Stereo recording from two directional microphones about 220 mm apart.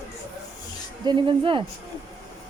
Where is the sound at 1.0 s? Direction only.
20° right (ahead or behind).